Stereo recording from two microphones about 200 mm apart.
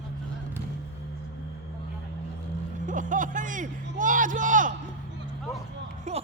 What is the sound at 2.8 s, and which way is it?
Speech, 40° right (ahead or behind).